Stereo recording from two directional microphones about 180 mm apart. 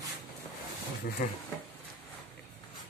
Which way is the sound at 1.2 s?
50° left (ahead or behind).